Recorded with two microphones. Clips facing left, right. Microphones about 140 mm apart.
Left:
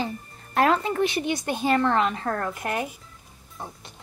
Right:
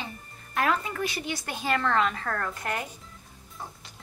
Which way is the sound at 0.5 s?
30° left (ahead or behind).